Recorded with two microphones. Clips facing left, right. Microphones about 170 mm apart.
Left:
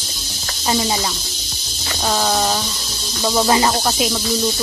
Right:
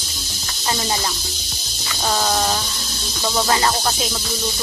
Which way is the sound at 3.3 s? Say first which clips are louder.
Left 3 dB; 15° left (ahead or behind).